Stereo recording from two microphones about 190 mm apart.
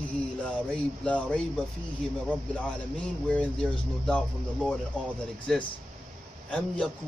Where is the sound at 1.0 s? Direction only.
5° left (ahead or behind).